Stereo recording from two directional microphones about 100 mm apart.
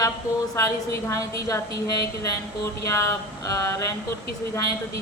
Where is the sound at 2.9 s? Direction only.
30° left (ahead or behind).